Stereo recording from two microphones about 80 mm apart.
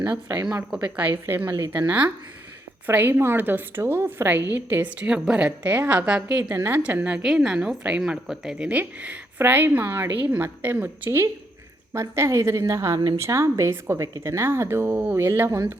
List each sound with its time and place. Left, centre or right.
0.9 s a woman's voice: right
1.5 s a woman's voice: right
1.9 s a woman's voice: centre
5.0 s a woman's voice: centre
5.5 s a woman's voice: right
6.6 s a woman's voice: right